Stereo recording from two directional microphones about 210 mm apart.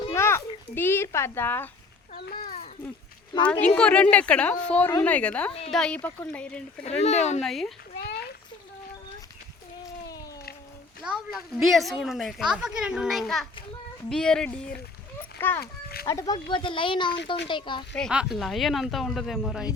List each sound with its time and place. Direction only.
0.1 s a sound: 10° left (ahead or behind)
2.1 s a child's voice: 45° left (ahead or behind)
3.8 s a woman's voice: 5° left (ahead or behind)
6.8 s speech: 30° left (ahead or behind)
7.4 s a woman's voice: centre (ahead or behind)
8.0 s a sound: 50° left (ahead or behind)
11.0 s a woman's voice: 5° right (ahead or behind)
15.6 s a child's voice: 45° left (ahead or behind)
16.0 s a woman's voice: 15° left (ahead or behind)
17.9 s a woman's voice: centre (ahead or behind)